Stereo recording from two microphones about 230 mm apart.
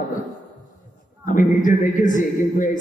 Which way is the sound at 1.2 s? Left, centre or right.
Left.